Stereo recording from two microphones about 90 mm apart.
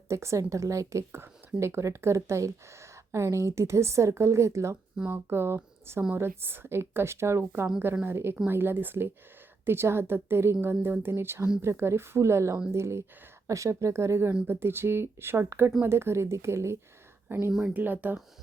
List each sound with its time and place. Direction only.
0.1 s a woman's voice: 30° right (ahead or behind)
4.9 s a woman's voice: 20° right (ahead or behind)